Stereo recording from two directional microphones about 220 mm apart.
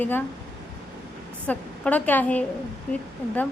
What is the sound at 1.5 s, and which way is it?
Speech, 5° left (ahead or behind).